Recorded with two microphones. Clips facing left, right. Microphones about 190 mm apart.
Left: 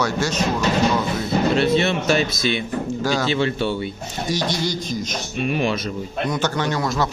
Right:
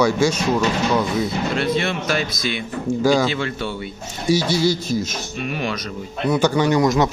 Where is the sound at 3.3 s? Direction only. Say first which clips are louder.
Left 4 dB; 25° left (ahead or behind).